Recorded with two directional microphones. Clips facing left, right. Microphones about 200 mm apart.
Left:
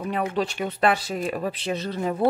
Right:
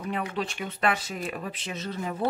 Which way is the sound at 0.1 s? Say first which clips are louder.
Left 5 dB; 40° left (ahead or behind).